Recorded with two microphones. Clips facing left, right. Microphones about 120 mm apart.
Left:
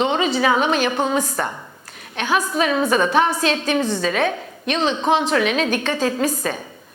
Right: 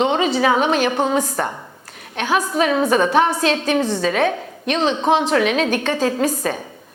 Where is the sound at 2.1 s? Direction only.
55° right (ahead or behind).